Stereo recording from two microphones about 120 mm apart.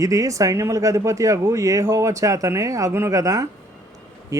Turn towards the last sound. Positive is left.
turn(degrees=-30)  # may be behind; listen again after turning